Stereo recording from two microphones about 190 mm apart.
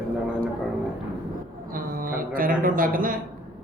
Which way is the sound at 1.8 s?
50° right (ahead or behind).